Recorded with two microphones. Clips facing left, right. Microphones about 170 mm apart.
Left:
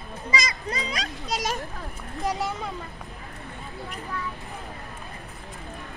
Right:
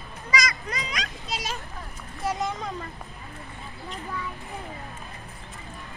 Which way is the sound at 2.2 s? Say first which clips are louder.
Even; 10° left (ahead or behind).